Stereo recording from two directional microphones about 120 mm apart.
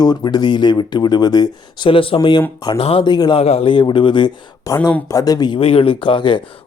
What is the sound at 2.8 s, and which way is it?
Speech, 55° left (ahead or behind).